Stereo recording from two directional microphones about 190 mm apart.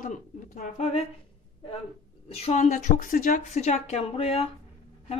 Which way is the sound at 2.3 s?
35° left (ahead or behind).